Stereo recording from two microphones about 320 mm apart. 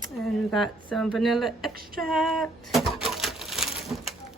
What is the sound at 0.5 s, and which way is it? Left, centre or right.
A woman's voice, centre.